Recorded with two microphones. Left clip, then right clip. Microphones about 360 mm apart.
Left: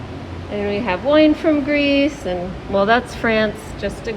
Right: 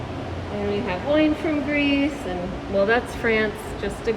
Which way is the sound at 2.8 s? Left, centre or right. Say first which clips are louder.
Left 5 dB; centre.